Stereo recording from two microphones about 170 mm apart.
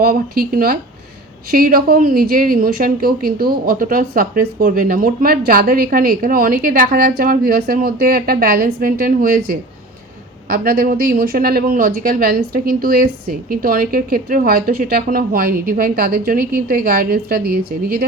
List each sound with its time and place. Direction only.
0.0 s a woman's voice: 60° right (ahead or behind)